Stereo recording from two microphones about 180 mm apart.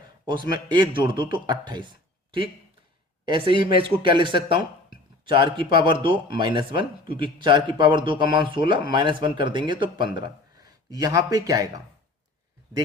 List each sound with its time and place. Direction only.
0.3 s speech: 25° right (ahead or behind)